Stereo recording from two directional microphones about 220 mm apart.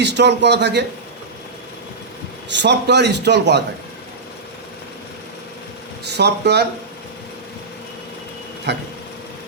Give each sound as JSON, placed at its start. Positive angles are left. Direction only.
{"t": 0.0, "sound": "a man's voice", "side_deg": -50}
{"t": 2.5, "sound": "a man's voice", "side_deg": -50}
{"t": 6.1, "sound": "a man's voice", "side_deg": -50}
{"t": 8.7, "sound": "a man's voice", "side_deg": -50}